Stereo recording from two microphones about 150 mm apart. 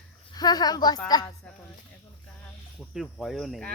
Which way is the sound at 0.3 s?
25° left (ahead or behind).